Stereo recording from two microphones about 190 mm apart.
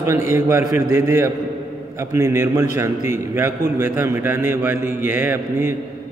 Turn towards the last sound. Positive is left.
turn(degrees=-10)  # may be behind; listen again after turning